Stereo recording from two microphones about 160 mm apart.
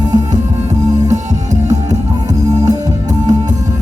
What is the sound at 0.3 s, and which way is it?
Music, 45° right (ahead or behind).